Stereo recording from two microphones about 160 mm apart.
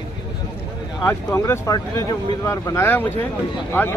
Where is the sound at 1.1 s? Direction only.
20° left (ahead or behind).